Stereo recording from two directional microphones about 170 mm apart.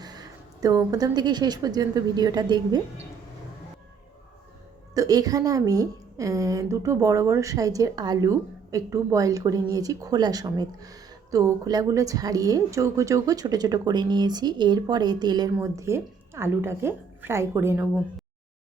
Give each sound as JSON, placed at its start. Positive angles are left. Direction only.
{"t": 0.0, "sound": "speech", "side_deg": -25}
{"t": 4.9, "sound": "a woman's voice", "side_deg": -20}